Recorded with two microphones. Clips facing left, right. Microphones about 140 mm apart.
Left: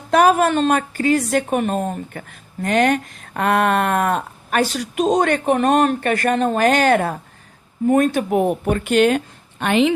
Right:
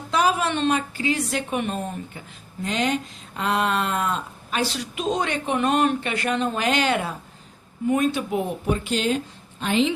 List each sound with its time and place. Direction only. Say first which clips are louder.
0.1 s a woman's voice: left 7 dB; 55° left (ahead or behind)